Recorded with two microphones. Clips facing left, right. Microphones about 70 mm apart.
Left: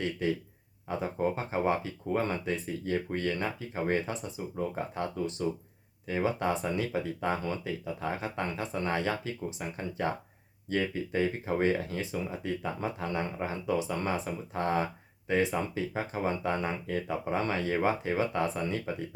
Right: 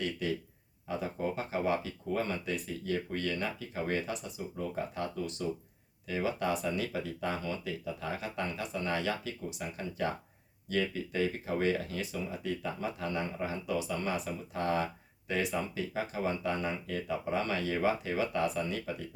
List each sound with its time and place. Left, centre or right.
0.2 s speech: left